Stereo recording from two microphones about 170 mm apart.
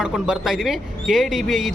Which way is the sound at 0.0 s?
5° right (ahead or behind).